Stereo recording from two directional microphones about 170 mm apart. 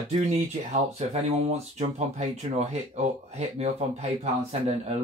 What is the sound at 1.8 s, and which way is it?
Speech, 40° right (ahead or behind).